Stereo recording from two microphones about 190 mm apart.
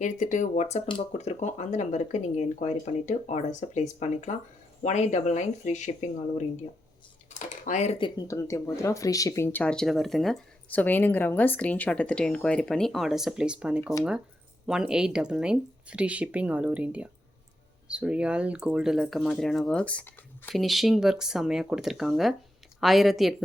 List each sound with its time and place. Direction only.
0.0 s speech: 40° left (ahead or behind); by 23.3 s centre (ahead or behind)